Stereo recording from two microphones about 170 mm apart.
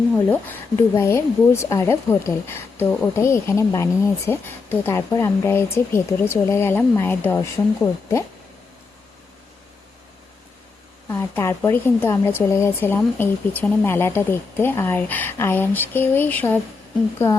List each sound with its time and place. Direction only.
0.3 s speech: 10° left (ahead or behind)
11.1 s speech: 15° left (ahead or behind)